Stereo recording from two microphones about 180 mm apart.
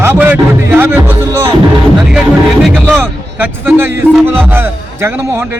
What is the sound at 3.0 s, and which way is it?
A man's voice, 10° right (ahead or behind).